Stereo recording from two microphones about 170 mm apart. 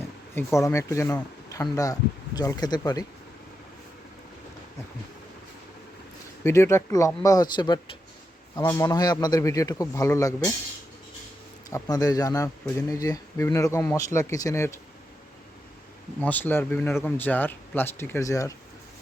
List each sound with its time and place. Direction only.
0.3 s a man's voice: 15° left (ahead or behind)
6.4 s a man's voice: 15° left (ahead or behind)
11.7 s a man's voice: 20° left (ahead or behind)
16.2 s speech: 10° left (ahead or behind)